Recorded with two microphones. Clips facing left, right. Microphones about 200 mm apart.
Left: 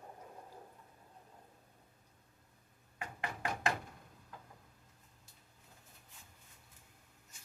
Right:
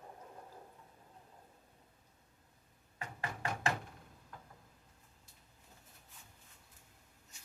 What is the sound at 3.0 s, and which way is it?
Knock, 15° left (ahead or behind).